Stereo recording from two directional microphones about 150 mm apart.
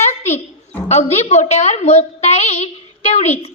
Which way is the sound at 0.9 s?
50° left (ahead or behind).